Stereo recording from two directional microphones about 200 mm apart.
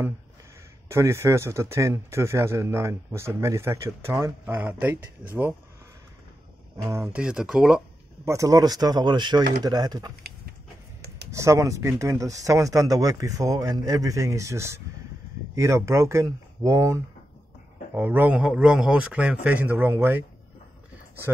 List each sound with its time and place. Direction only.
0.8 s speech: 15° right (ahead or behind)
6.9 s speech: 10° right (ahead or behind)
8.3 s speech: 15° right (ahead or behind)
11.3 s speech: 15° right (ahead or behind)